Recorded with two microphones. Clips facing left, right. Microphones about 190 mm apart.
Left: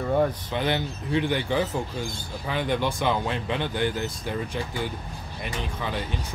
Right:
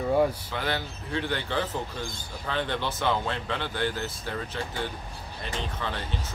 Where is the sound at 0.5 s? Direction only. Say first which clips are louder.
Left 4 dB; 20° left (ahead or behind).